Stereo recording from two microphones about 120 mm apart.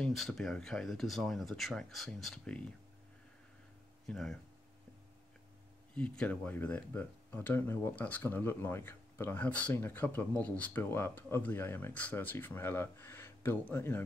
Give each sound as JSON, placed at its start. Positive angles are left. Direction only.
{"t": 0.0, "sound": "speech", "side_deg": 5}
{"t": 4.1, "sound": "speech", "side_deg": 5}
{"t": 5.9, "sound": "speech", "side_deg": 10}